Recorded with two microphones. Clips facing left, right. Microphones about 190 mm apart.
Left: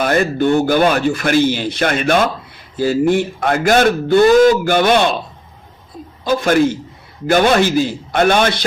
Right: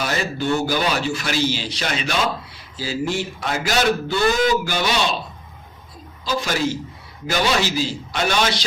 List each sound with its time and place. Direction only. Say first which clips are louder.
0.0 s a man's voice: left 9 dB; 55° left (ahead or behind)
6.2 s a man's voice: left 9 dB; 55° left (ahead or behind)